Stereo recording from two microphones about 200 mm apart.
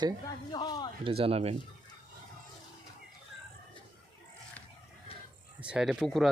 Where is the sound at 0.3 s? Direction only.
20° left (ahead or behind).